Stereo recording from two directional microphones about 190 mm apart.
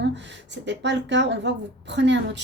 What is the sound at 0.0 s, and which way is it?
A woman's voice, 65° right (ahead or behind).